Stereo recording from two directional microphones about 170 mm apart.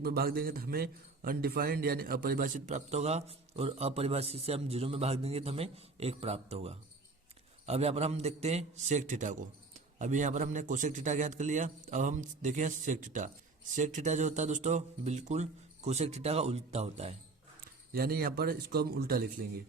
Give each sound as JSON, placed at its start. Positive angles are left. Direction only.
{"t": 0.0, "sound": "a man's voice", "side_deg": -65}
{"t": 17.9, "sound": "speech", "side_deg": -65}